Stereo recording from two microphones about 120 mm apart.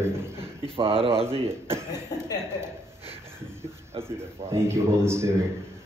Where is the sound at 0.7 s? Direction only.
50° right (ahead or behind).